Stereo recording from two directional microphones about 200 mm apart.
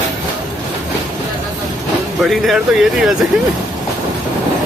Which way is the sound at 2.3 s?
Centre (ahead or behind).